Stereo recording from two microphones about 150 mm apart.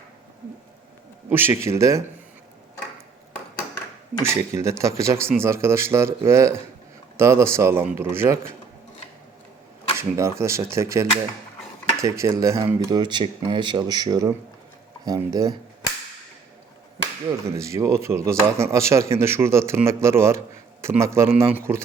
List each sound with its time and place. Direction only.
1.3 s speech: 15° right (ahead or behind)
4.2 s speech: 20° right (ahead or behind)
10.0 s speech: 20° right (ahead or behind)
17.6 s speech: 20° right (ahead or behind)